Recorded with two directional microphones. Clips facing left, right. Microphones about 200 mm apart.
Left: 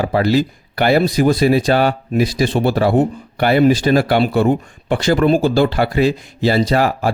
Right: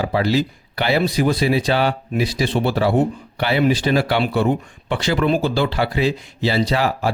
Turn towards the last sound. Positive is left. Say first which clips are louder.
# left 4 dB
turn(degrees=50)  # may be behind; listen again after turning